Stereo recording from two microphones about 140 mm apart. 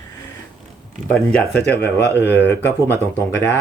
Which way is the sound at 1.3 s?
10° left (ahead or behind).